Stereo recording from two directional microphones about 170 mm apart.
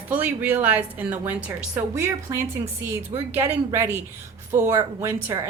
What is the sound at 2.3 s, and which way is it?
Speech, 20° right (ahead or behind).